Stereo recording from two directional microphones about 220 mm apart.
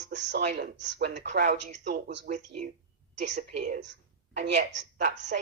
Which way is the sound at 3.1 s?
30° right (ahead or behind).